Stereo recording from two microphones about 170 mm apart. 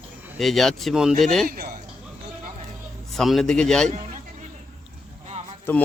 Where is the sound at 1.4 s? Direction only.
60° right (ahead or behind).